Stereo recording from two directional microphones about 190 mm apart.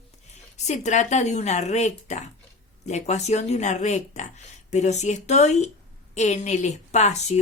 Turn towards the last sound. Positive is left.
turn(degrees=35)  # may be behind; listen again after turning